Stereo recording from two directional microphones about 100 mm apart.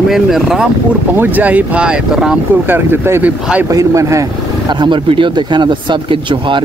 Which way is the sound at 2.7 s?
20° right (ahead or behind).